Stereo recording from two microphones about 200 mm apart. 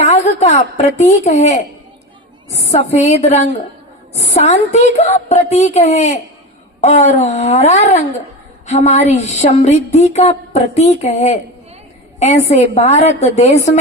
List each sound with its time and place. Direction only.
0.0 s a woman's voice: 35° left (ahead or behind)